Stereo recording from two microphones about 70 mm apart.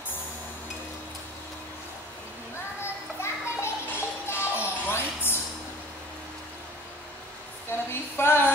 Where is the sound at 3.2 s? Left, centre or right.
Left.